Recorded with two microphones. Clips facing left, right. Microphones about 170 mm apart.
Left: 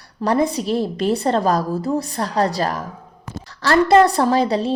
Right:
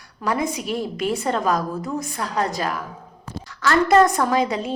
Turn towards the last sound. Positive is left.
turn(degrees=35)  # may be behind; listen again after turning